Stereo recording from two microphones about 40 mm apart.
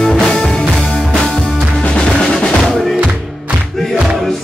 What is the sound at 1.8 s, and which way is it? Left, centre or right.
Drum, left.